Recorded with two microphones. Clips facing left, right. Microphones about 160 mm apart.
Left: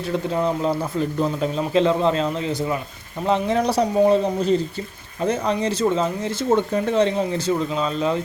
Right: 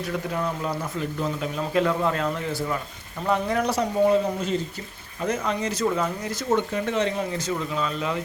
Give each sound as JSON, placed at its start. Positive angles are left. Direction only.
{"t": 0.1, "sound": "speech", "side_deg": 25}